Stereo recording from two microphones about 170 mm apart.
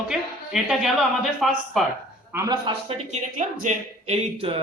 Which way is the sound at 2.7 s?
40° right (ahead or behind).